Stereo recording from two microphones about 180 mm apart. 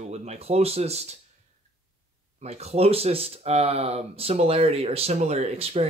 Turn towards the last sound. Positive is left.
turn(degrees=-35)  # may be behind; listen again after turning